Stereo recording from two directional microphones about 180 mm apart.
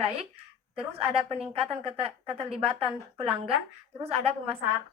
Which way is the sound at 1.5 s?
30° right (ahead or behind).